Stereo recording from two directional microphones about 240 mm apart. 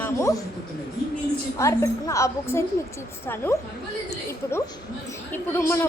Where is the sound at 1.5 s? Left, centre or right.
Centre.